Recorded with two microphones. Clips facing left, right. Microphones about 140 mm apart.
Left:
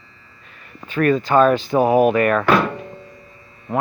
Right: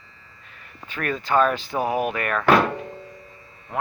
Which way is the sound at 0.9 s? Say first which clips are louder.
Left 7 dB; 5° right (ahead or behind).